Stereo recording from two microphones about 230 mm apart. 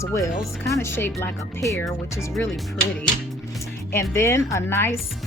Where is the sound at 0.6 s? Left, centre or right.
Centre.